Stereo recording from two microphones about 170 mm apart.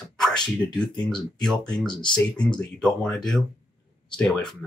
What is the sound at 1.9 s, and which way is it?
Speech, 25° left (ahead or behind).